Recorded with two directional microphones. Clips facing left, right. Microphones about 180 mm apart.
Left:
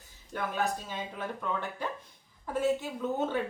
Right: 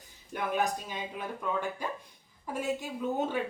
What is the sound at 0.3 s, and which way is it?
Speech, 15° right (ahead or behind).